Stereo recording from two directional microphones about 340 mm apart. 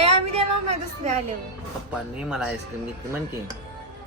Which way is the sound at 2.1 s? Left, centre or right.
Centre.